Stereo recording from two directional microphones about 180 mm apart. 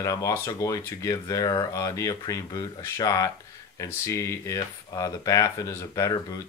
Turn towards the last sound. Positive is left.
turn(degrees=20)  # may be behind; listen again after turning